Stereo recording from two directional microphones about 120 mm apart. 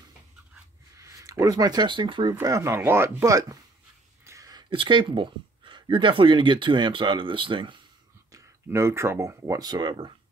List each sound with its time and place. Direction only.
0.9 s speech: 25° right (ahead or behind); by 2.3 s 45° right (ahead or behind)
2.4 s speech: 25° right (ahead or behind); by 7.8 s 45° right (ahead or behind)
8.3 s speech: 25° right (ahead or behind); by 10.1 s 40° right (ahead or behind)